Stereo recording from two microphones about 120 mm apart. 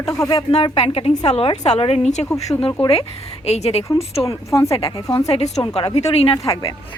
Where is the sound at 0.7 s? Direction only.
55° left (ahead or behind).